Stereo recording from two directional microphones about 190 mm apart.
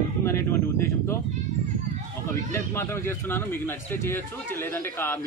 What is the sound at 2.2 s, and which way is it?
A man's voice, 15° left (ahead or behind).